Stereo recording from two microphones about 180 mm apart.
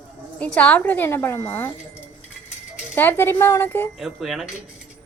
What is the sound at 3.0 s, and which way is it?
Speech, 10° left (ahead or behind).